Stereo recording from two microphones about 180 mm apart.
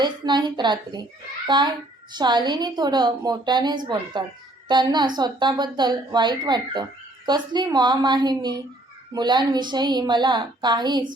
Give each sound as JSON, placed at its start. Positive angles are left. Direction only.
{"t": 0.0, "sound": "a woman's voice", "side_deg": -25}